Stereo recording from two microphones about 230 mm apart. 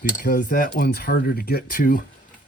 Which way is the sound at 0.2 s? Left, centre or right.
Left.